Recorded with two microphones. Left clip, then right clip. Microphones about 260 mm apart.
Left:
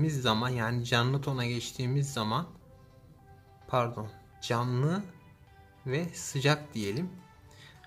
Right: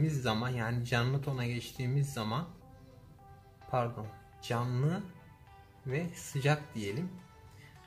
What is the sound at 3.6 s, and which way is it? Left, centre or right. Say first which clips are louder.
Speech: left 4 dB; centre.